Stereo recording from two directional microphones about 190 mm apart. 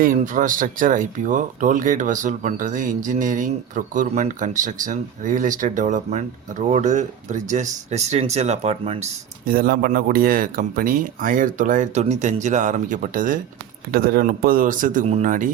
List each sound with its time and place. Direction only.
0.0 s speech: 45° right (ahead or behind)
9.5 s speech: 50° right (ahead or behind)